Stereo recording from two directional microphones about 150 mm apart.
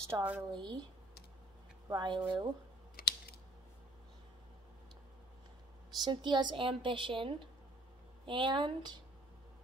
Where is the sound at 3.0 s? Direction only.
90° left.